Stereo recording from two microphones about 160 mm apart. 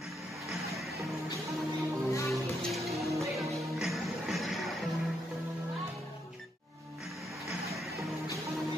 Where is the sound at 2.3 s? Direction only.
Centre (ahead or behind).